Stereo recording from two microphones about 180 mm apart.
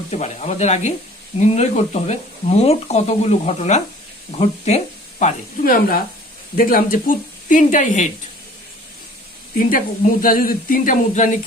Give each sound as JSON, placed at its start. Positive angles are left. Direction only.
{"t": 0.1, "sound": "speech", "side_deg": 40}
{"t": 5.2, "sound": "speech", "side_deg": 50}
{"t": 9.6, "sound": "speech", "side_deg": 50}